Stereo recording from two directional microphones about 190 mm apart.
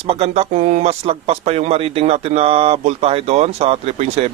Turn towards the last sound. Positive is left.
turn(degrees=-35)  # may be behind; listen again after turning